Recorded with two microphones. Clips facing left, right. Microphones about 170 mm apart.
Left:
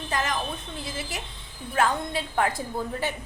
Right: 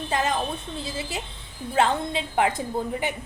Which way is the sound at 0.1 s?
25° right (ahead or behind).